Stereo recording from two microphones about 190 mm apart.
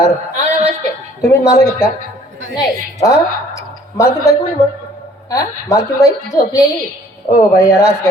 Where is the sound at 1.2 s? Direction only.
15° left (ahead or behind).